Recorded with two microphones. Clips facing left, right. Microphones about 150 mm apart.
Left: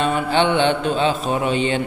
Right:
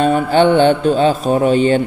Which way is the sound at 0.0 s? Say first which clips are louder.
Right 6 dB; 45° right (ahead or behind).